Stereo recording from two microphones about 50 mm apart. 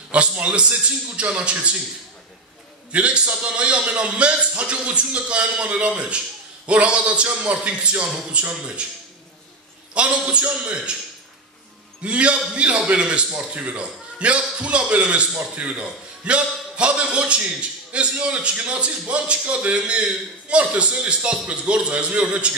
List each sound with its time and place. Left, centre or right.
0.1 s a man's voice: right
2.9 s a man's voice: right
9.9 s a man's voice: right
12.0 s a man's voice: right